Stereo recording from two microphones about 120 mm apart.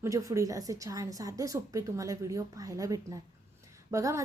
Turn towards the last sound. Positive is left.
turn(degrees=-25)  # may be behind; listen again after turning